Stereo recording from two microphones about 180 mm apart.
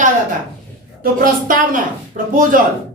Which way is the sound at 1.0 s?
50° right (ahead or behind).